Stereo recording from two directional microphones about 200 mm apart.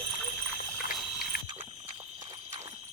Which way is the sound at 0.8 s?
50° left (ahead or behind).